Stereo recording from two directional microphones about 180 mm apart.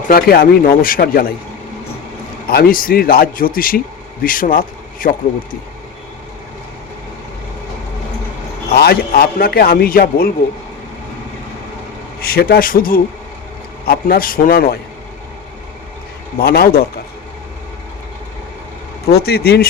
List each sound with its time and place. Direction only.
0.1 s a man's voice: 55° left (ahead or behind)
2.5 s a man's voice: 55° left (ahead or behind)
8.7 s a man's voice: 60° left (ahead or behind)
12.2 s a man's voice: 55° left (ahead or behind)
16.4 s a man's voice: 55° left (ahead or behind)
19.1 s a man's voice: 60° left (ahead or behind)